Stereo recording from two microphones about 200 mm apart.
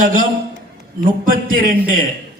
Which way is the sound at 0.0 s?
40° right (ahead or behind).